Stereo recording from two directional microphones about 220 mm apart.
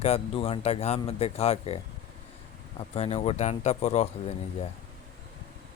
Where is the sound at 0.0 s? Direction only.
25° left (ahead or behind).